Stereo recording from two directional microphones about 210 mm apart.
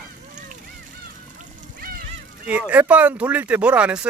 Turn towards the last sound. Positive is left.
turn(degrees=-5)  # may be behind; listen again after turning